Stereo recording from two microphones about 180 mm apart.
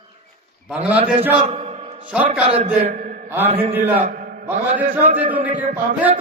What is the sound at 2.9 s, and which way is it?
Mantra, 45° right (ahead or behind).